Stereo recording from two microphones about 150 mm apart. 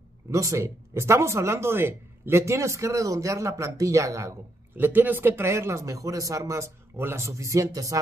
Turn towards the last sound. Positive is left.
turn(degrees=-20)  # may be behind; listen again after turning